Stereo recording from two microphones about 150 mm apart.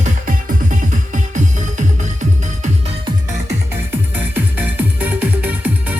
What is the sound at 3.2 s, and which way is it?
Music, 20° right (ahead or behind).